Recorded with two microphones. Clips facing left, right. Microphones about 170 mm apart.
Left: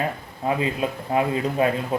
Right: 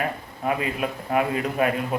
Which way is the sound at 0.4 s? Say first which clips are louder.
Left 2 dB; 25° left (ahead or behind).